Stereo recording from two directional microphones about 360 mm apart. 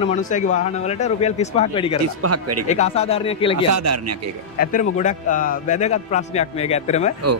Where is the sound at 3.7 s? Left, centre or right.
Right.